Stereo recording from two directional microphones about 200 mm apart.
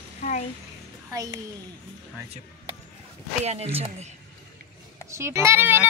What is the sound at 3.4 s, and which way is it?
Speech, 30° right (ahead or behind).